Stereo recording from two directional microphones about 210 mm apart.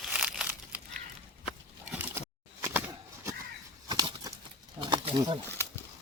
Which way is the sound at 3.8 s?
20° right (ahead or behind).